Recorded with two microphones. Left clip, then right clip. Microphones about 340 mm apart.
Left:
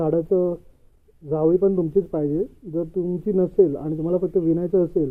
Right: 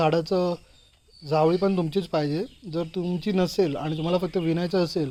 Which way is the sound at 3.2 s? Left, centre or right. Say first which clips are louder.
Left 6 dB; right.